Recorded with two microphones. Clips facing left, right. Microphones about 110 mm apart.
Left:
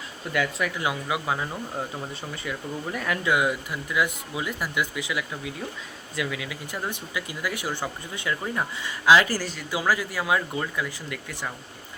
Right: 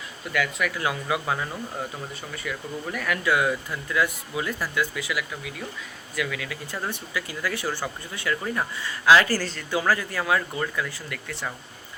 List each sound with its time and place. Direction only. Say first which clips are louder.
0.3 s speech: even; 25° left (ahead or behind)
2.3 s speech: right 1 dB; 25° left (ahead or behind)